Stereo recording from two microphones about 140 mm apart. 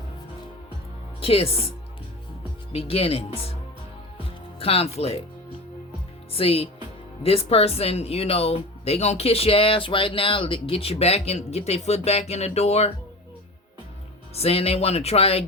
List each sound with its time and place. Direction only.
1.2 s speech: 45° left (ahead or behind)
2.7 s speech: 45° left (ahead or behind)
4.6 s speech: 45° left (ahead or behind)
6.3 s speech: 45° left (ahead or behind)
14.3 s speech: 45° left (ahead or behind)